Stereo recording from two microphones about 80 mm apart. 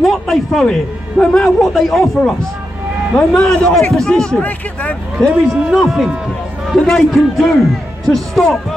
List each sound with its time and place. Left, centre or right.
0.0 s a man's voice: centre
4.4 s speech: centre
5.5 s a man's voice: centre